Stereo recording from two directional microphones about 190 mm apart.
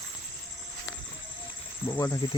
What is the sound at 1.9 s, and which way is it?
Speech, 15° left (ahead or behind).